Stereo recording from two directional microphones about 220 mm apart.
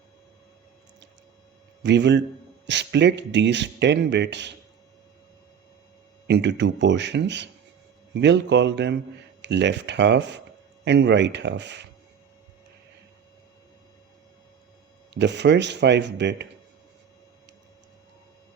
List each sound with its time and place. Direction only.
1.8 s speech: 55° right (ahead or behind)
6.2 s speech: 50° right (ahead or behind)
15.1 s speech: 50° right (ahead or behind)